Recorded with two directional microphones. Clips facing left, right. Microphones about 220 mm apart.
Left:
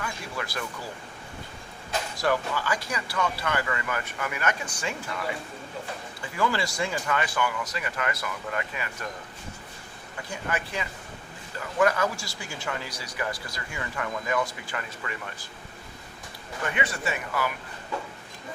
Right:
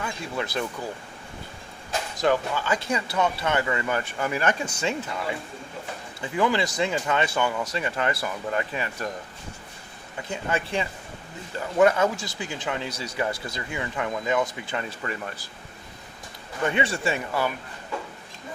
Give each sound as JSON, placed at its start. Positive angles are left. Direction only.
{"t": 0.0, "sound": "speech", "side_deg": -25}
{"t": 2.1, "sound": "speech", "side_deg": -20}
{"t": 6.3, "sound": "speech", "side_deg": -20}
{"t": 10.2, "sound": "speech", "side_deg": -25}
{"t": 16.6, "sound": "speech", "side_deg": -25}